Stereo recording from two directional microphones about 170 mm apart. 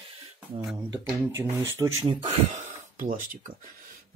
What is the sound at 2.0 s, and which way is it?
Speech, 45° right (ahead or behind).